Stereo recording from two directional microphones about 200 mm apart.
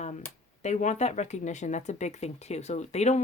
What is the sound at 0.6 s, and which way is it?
Speech, 35° left (ahead or behind).